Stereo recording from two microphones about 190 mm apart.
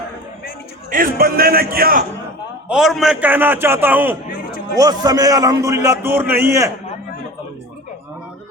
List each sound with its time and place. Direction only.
0.9 s a man's voice: 50° right (ahead or behind)
2.6 s a man's voice: centre (ahead or behind)